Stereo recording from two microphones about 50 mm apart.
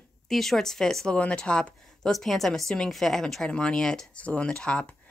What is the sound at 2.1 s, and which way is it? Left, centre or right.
Speech, centre.